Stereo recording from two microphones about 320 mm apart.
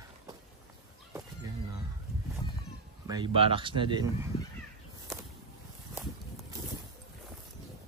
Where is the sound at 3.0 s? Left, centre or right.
Centre.